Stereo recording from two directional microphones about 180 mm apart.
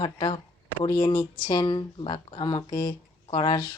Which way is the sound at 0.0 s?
25° left (ahead or behind).